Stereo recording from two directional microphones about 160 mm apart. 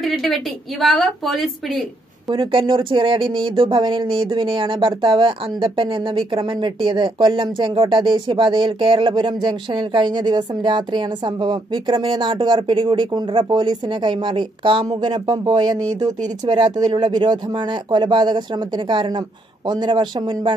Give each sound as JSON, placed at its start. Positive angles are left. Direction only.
{"t": 0.0, "sound": "a woman's voice", "side_deg": 0}
{"t": 2.2, "sound": "speech", "side_deg": -30}